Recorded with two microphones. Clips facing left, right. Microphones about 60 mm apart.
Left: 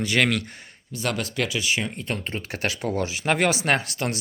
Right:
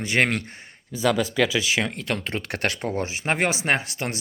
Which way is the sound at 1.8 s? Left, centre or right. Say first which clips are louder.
Right 2 dB; right.